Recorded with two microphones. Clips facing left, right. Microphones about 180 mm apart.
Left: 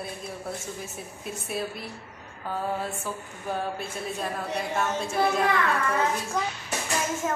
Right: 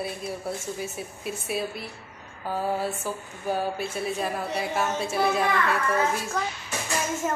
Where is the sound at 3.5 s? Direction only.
5° right (ahead or behind).